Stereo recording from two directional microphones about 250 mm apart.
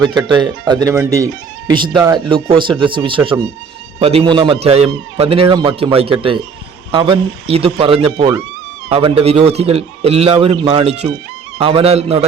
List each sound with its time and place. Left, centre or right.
0.0 s a man's voice: centre